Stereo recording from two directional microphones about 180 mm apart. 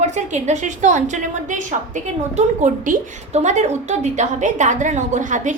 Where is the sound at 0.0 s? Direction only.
40° right (ahead or behind).